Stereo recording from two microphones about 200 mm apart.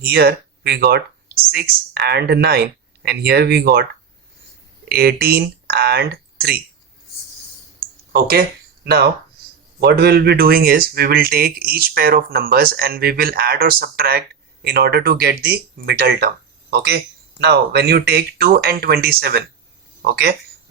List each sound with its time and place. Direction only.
0.0 s speech: 50° right (ahead or behind)
4.9 s speech: 50° right (ahead or behind)
8.1 s speech: 50° right (ahead or behind)